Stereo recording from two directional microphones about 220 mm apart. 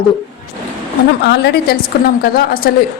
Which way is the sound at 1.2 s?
50° left (ahead or behind).